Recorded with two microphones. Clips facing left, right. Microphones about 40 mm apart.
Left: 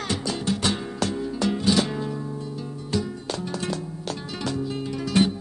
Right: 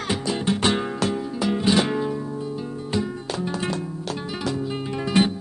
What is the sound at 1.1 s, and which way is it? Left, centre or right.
Music, centre.